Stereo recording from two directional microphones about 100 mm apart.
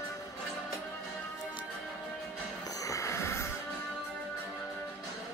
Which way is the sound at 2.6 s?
35° left (ahead or behind).